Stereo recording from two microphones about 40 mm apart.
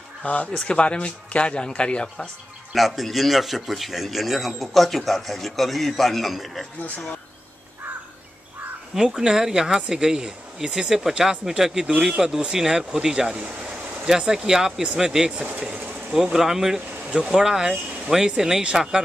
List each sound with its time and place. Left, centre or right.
0.2 s speech: left
2.7 s speech: centre
8.9 s speech: centre
14.0 s speech: centre